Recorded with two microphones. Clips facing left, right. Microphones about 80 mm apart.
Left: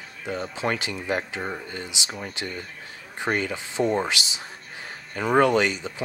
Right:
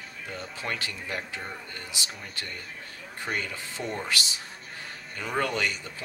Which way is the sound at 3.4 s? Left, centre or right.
Left.